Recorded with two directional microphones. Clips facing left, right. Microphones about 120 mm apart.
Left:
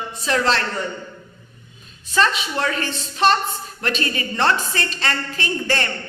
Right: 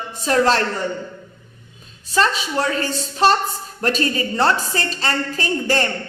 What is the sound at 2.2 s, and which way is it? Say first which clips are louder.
A woman's voice: right 1 dB; 35° right (ahead or behind).